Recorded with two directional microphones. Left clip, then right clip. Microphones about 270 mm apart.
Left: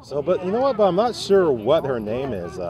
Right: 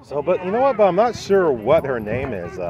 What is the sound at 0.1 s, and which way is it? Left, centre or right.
Speech, centre.